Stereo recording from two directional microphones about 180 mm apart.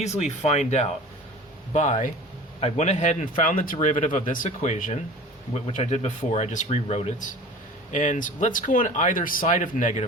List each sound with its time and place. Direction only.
0.0 s speech: 40° left (ahead or behind)